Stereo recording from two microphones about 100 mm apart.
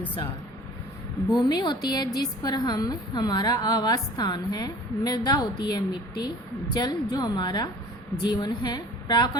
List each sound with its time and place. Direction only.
1.3 s a woman's voice: 45° left (ahead or behind)